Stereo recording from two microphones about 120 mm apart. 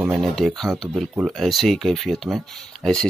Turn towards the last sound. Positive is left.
turn(degrees=5)  # may be behind; listen again after turning